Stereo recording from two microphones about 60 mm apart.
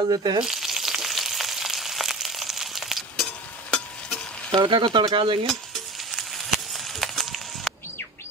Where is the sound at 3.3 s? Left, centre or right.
Left.